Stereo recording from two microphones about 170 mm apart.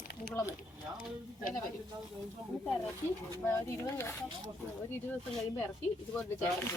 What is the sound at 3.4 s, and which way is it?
Speech, 15° left (ahead or behind).